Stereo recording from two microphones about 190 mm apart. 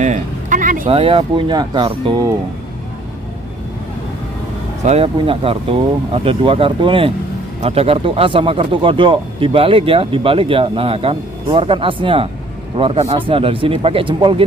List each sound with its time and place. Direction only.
0.0 s a sound: 40° right (ahead or behind)
0.8 s speech: 30° right (ahead or behind)
4.8 s speech: 30° right (ahead or behind)